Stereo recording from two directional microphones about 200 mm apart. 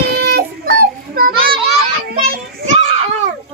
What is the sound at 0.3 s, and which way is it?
Child singing, 50° right (ahead or behind).